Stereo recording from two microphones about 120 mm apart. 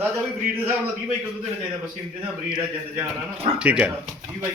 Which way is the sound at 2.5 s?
15° right (ahead or behind).